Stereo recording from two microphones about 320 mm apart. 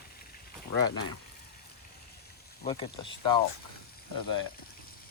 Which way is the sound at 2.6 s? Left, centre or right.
Centre.